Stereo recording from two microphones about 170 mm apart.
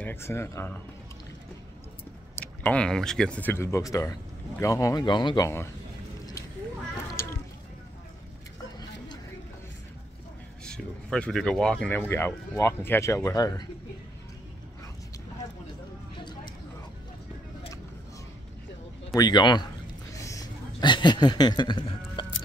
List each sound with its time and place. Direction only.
0.0 s speech: 15° left (ahead or behind)
2.3 s speech: 10° left (ahead or behind)
7.2 s a sound: 15° left (ahead or behind)
10.6 s speech: 5° left (ahead or behind); by 13.7 s 20° left (ahead or behind)
19.1 s speech: 25° left (ahead or behind)
20.2 s a sound: 20° left (ahead or behind)